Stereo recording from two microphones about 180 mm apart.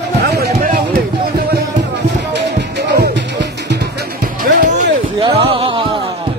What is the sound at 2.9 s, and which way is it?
Music, 70° right (ahead or behind).